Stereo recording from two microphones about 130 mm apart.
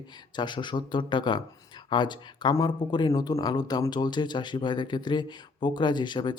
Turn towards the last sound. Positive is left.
turn(degrees=35)  # may be behind; listen again after turning